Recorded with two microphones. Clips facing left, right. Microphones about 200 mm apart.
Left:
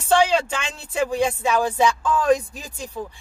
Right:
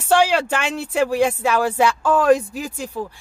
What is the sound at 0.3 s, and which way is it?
Speech, 75° right (ahead or behind).